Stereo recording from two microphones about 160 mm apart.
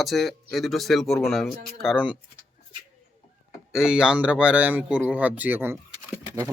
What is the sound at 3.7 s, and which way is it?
Speech, 5° right (ahead or behind).